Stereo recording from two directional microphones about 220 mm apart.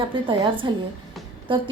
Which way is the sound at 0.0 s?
25° right (ahead or behind).